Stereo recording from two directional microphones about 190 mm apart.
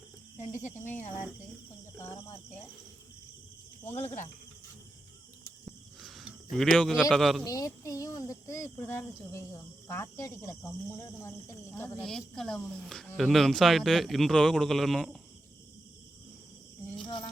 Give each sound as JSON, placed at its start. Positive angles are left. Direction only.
{"t": 0.3, "sound": "speech", "side_deg": 40}
{"t": 2.0, "sound": "speech", "side_deg": 15}
{"t": 5.6, "sound": "cricket", "side_deg": 0}
{"t": 7.4, "sound": "speech", "side_deg": 20}
{"t": 12.0, "sound": "a man's voice", "side_deg": 0}